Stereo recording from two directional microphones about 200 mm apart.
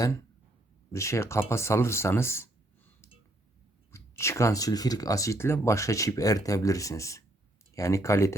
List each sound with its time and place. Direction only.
0.9 s speech: 15° left (ahead or behind)
3.9 s speech: 15° left (ahead or behind)